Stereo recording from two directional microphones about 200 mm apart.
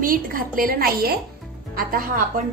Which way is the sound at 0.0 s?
45° right (ahead or behind).